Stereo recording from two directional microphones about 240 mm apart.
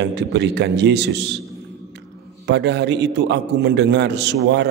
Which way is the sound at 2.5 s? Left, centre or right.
Right.